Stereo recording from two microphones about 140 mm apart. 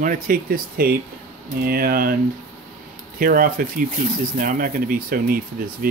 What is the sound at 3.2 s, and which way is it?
Speech, 80° right.